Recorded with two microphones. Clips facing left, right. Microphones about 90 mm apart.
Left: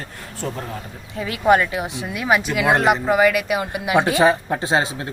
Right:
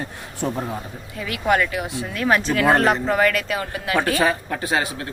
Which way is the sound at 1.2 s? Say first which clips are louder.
Left 4 dB; 25° left (ahead or behind).